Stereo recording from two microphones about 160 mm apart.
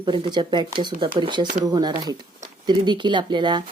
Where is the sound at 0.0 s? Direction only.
30° right (ahead or behind).